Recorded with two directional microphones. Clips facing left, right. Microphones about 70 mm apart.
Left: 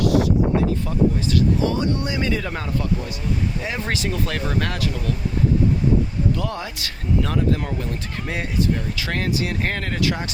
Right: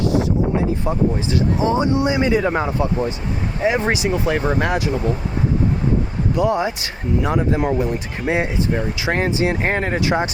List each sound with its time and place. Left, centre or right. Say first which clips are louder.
0.0 s a sound: even; right
0.9 s speech: right 1 dB; right
6.3 s speech: right 9 dB; centre